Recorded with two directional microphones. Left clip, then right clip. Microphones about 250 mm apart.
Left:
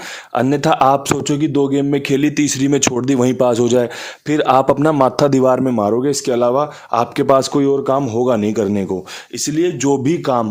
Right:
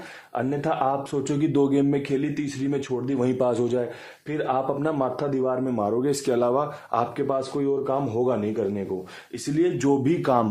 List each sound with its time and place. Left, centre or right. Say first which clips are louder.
0.3 s a man's voice: left 11 dB; left
1.3 s a man's voice: left 5 dB; left
4.3 s a man's voice: left 12 dB; left
9.6 s speech: left 6 dB; left